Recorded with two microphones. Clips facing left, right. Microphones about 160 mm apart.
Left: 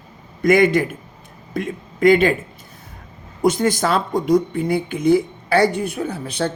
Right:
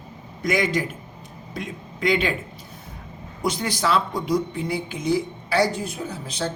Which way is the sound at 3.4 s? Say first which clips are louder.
Left 7 dB; 50° left (ahead or behind).